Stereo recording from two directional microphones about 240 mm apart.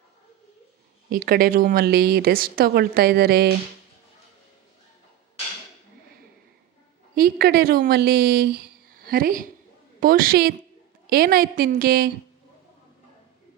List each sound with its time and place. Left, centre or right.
1.1 s a woman's voice: right
7.2 s a woman's voice: right